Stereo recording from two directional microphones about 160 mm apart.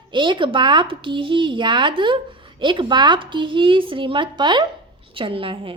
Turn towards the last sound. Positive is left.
turn(degrees=-35)  # may be behind; listen again after turning